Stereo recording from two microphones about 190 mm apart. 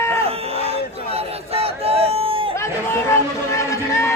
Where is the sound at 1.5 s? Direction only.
30° right (ahead or behind).